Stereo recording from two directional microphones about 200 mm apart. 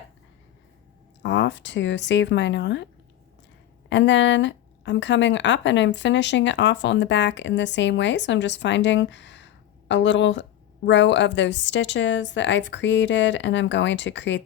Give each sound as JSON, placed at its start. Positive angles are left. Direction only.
{"t": 1.2, "sound": "speech", "side_deg": 60}